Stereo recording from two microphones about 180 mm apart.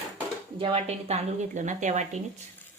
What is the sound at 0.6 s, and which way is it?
Speech, 30° right (ahead or behind).